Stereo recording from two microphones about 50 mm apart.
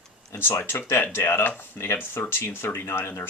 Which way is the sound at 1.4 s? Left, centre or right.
Left.